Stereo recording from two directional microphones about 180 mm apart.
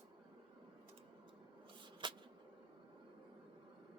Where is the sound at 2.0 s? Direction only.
25° right (ahead or behind).